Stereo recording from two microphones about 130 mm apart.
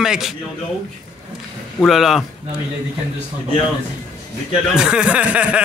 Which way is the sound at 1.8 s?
Centre (ahead or behind).